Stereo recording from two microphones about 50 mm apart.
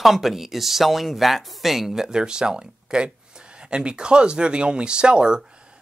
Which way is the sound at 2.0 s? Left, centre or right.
Centre.